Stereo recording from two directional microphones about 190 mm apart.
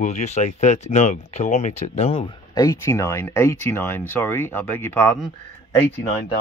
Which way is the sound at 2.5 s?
15° left (ahead or behind).